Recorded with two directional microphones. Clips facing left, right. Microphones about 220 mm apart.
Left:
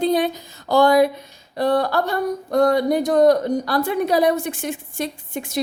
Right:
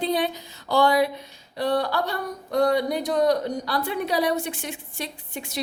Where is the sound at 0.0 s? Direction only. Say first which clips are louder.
Left 5 dB; 45° left (ahead or behind).